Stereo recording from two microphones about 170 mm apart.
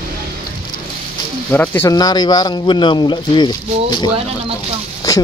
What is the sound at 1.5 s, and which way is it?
Speech, 10° left (ahead or behind).